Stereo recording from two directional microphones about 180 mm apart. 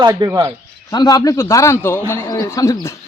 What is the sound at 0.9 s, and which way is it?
A man's voice, 20° left (ahead or behind).